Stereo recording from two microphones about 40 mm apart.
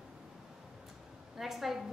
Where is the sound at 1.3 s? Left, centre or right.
Centre.